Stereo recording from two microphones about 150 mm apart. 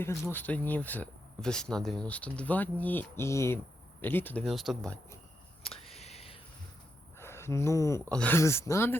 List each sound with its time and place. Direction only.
0.0 s speech: 15° left (ahead or behind)
4.4 s speech: centre (ahead or behind)
5.8 s a sound: 45° left (ahead or behind)
7.2 s speech: 15° left (ahead or behind)